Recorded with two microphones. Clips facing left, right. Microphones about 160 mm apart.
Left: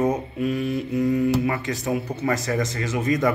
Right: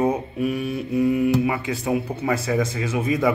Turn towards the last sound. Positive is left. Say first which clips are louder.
# even
turn(degrees=-10)  # may be behind; listen again after turning